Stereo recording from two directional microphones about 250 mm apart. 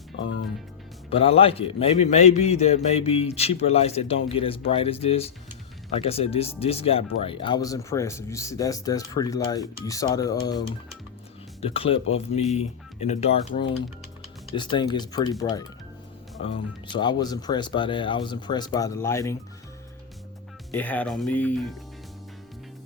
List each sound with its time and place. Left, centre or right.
1.1 s speech: left
20.7 s speech: centre